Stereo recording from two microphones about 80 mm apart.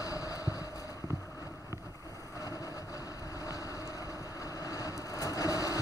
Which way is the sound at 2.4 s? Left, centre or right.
Left.